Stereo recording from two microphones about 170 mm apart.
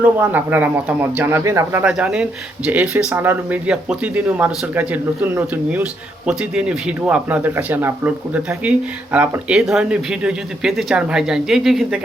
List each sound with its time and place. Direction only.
0.0 s speech: 10° right (ahead or behind)